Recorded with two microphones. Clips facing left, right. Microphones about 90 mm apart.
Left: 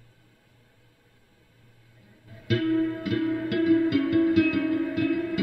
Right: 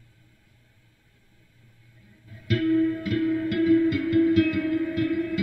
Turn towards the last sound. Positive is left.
turn(degrees=50)  # may be behind; listen again after turning